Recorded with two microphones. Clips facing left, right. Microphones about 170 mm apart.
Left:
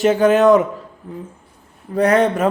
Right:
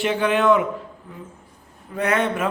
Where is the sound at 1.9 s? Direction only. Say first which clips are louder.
Left 7 dB; 40° left (ahead or behind).